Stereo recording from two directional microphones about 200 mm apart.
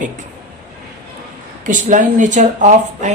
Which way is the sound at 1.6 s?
40° right (ahead or behind).